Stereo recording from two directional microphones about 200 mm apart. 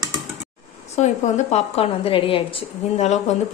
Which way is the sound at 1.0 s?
35° left (ahead or behind).